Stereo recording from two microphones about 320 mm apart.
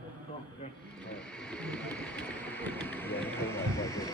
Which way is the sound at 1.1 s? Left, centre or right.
Centre.